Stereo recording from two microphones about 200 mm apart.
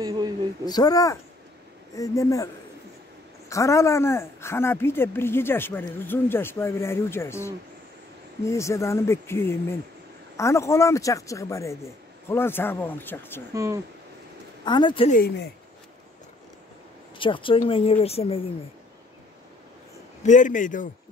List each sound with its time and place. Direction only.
0.0 s a man's voice: 20° right (ahead or behind)
0.7 s a woman's voice: 20° left (ahead or behind)
13.5 s speech: 15° right (ahead or behind)
14.6 s a woman's voice: 20° left (ahead or behind)
15.0 s speech: 50° left (ahead or behind)
17.2 s a woman's voice: 25° left (ahead or behind)
20.2 s speech: 40° left (ahead or behind)